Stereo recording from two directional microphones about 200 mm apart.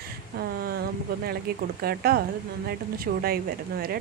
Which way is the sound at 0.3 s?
50° right (ahead or behind).